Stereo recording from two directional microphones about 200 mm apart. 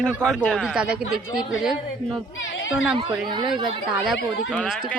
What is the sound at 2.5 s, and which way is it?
Speech, 70° left (ahead or behind).